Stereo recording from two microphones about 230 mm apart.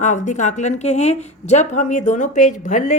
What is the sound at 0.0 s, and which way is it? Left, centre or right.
A woman's voice, left.